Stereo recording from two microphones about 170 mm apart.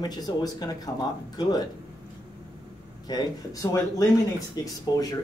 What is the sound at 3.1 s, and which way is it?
Speech, 25° left (ahead or behind).